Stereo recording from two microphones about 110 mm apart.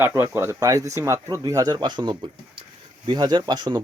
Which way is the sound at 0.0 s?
20° right (ahead or behind).